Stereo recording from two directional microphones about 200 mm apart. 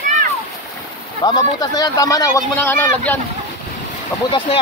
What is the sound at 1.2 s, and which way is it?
Speech, 20° left (ahead or behind).